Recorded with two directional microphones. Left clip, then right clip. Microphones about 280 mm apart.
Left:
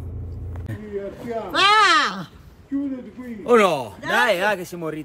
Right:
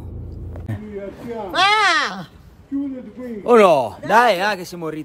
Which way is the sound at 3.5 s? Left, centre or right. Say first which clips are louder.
Right 5 dB; centre.